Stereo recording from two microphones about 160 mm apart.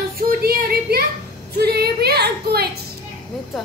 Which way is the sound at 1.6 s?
90° right.